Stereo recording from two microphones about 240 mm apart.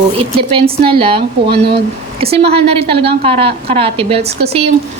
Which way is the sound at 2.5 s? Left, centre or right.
Right.